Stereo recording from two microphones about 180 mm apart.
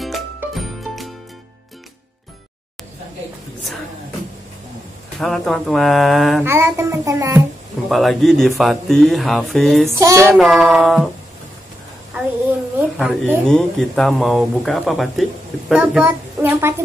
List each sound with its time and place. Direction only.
0.6 s music: centre (ahead or behind)
5.2 s speech: centre (ahead or behind)
6.4 s a child's voice: 15° right (ahead or behind)
7.9 s speech: centre (ahead or behind)
9.9 s a child's voice: 15° right (ahead or behind)
10.3 s speech: centre (ahead or behind)
12.7 s a child's voice: 5° right (ahead or behind)